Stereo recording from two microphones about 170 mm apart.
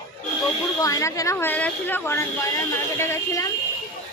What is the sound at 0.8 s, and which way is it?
A woman's voice, 20° left (ahead or behind).